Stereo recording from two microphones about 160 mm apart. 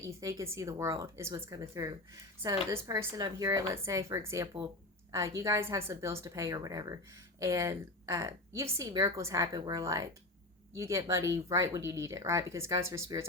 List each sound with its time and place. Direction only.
0.0 s a woman's voice: 20° right (ahead or behind)